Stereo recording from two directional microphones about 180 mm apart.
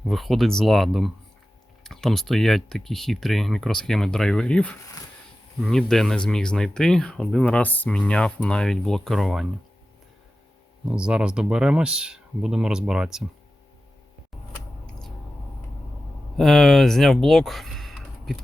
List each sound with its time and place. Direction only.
0.1 s speech: centre (ahead or behind)
10.8 s speech: 5° right (ahead or behind)
16.4 s speech: centre (ahead or behind)